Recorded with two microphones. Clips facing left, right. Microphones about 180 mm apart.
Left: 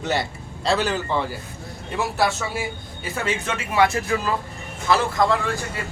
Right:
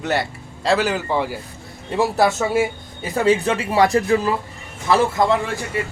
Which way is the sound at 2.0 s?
40° right (ahead or behind).